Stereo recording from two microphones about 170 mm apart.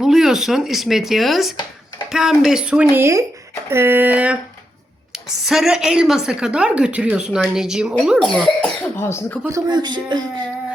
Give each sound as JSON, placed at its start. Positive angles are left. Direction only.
{"t": 0.0, "sound": "a woman's voice", "side_deg": -5}
{"t": 3.7, "sound": "a sound", "side_deg": -15}
{"t": 5.1, "sound": "a woman's voice", "side_deg": 0}
{"t": 9.0, "sound": "speech", "side_deg": 15}
{"t": 9.6, "sound": "speech", "side_deg": -25}